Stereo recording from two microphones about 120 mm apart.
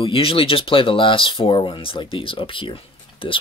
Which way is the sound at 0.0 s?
50° left (ahead or behind).